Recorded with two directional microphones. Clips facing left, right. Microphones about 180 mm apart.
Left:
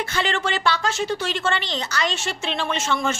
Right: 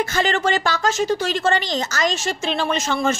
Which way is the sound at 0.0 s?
45° right (ahead or behind).